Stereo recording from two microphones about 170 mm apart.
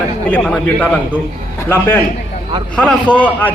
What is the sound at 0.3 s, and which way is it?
Speech, 5° left (ahead or behind).